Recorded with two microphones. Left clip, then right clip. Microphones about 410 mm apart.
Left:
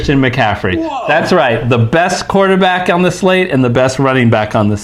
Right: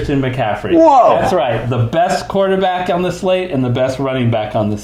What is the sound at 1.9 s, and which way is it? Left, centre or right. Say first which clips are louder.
Speech: even; left.